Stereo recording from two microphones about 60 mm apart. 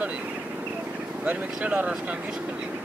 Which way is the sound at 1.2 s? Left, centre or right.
Right.